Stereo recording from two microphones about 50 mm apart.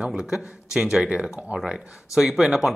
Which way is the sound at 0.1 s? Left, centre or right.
Centre.